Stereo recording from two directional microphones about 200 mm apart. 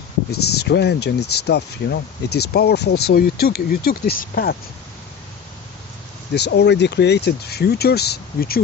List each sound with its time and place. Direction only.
0.6 s speech: 55° left (ahead or behind)
6.3 s speech: 55° left (ahead or behind)